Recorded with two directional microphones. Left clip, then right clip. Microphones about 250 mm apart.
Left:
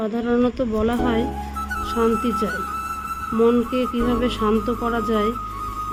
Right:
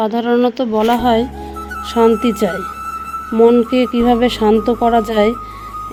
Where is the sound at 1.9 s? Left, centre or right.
Right.